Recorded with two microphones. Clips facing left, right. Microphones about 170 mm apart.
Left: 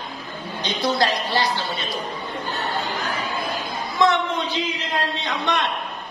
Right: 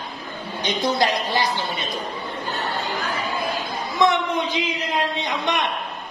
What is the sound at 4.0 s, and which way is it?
Speech, 20° right (ahead or behind).